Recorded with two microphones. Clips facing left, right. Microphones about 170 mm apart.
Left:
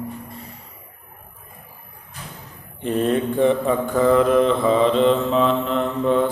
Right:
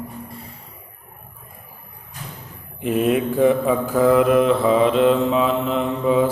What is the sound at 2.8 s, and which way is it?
Mantra, 10° right (ahead or behind).